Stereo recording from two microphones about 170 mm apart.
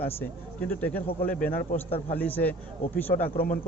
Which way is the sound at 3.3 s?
55° left (ahead or behind).